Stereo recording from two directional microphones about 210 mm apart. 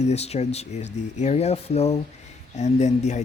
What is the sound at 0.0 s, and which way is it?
Speech, 30° left (ahead or behind).